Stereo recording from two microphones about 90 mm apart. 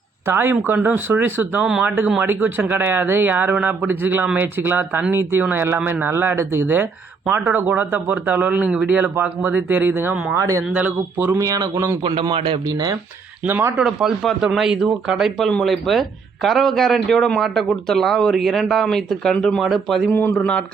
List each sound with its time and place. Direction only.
0.3 s speech: 25° right (ahead or behind)
9.0 s speech: 25° right (ahead or behind)
11.3 s speech: 40° right (ahead or behind)
12.6 s speech: 45° right (ahead or behind)
13.4 s speech: 25° right (ahead or behind)
13.8 s a man's voice: 5° right (ahead or behind)
15.4 s a man's voice: 5° left (ahead or behind)
20.1 s speech: 25° left (ahead or behind)